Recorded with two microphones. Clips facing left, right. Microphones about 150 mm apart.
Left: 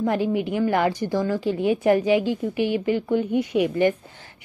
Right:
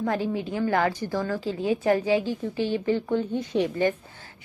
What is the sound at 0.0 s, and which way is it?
A woman's voice, 15° left (ahead or behind).